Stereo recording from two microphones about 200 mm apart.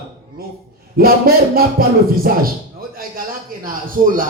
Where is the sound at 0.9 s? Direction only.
50° right (ahead or behind).